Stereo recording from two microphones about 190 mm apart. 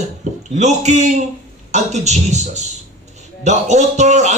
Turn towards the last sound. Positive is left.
turn(degrees=-40)  # may be behind; listen again after turning